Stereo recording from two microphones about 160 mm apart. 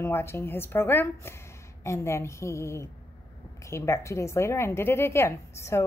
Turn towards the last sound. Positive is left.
turn(degrees=15)  # may be behind; listen again after turning